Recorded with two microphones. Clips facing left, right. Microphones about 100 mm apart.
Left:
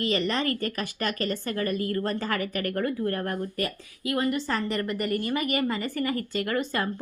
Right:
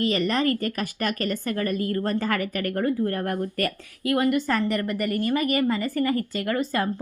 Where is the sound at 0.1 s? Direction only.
40° right (ahead or behind).